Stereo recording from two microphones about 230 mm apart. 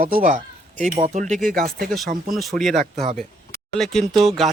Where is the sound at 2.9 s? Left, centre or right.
Right.